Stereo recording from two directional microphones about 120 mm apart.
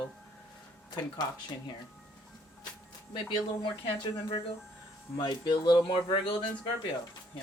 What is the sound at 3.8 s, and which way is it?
Speech, 50° left (ahead or behind).